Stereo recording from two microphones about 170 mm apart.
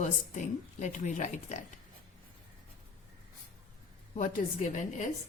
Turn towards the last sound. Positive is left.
turn(degrees=45)  # may be behind; listen again after turning